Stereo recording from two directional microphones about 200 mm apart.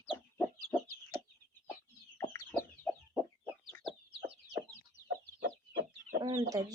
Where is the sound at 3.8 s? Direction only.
25° right (ahead or behind).